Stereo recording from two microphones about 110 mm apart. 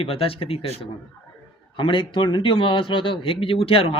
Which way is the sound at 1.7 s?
50° left (ahead or behind).